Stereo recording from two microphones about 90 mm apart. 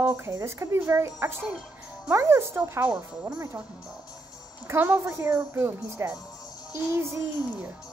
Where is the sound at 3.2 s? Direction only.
25° right (ahead or behind).